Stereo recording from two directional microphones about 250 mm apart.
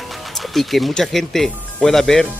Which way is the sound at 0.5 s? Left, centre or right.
Centre.